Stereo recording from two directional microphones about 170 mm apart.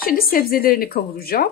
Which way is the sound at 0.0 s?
60° left (ahead or behind).